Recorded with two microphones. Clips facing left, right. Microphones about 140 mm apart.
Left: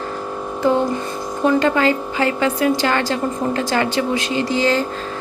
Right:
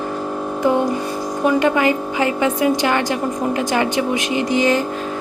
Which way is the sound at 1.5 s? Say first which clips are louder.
Even; 15° right (ahead or behind).